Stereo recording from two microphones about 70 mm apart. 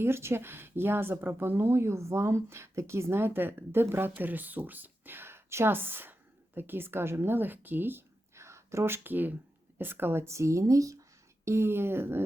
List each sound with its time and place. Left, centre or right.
0.0 s speech: right
11.4 s speech: right